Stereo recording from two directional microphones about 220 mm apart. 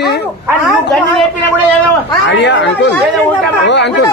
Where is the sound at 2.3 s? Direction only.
55° left (ahead or behind).